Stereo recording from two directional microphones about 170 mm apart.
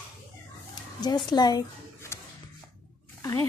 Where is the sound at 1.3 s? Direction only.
20° left (ahead or behind).